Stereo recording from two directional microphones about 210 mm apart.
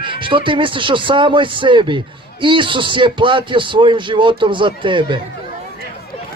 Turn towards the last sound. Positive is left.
turn(degrees=-25)  # may be behind; listen again after turning